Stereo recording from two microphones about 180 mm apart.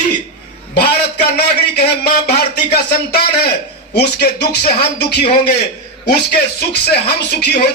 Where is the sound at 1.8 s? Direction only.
65° left (ahead or behind).